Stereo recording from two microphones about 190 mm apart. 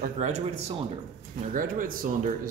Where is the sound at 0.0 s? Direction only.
35° right (ahead or behind).